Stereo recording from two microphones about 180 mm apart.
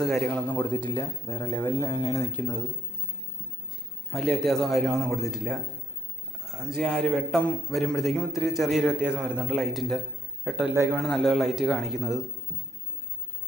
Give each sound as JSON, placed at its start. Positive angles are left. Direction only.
{"t": 0.0, "sound": "speech", "side_deg": 5}
{"t": 0.8, "sound": "speech", "side_deg": 25}
{"t": 4.1, "sound": "a man's voice", "side_deg": 0}